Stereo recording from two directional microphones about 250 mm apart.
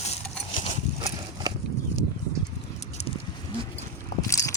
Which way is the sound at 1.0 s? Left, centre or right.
Centre.